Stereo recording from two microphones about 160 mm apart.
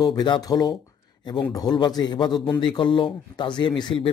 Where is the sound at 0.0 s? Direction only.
25° left (ahead or behind).